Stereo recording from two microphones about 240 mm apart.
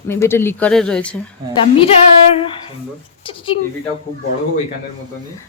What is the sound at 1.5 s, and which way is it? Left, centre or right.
Speech, left.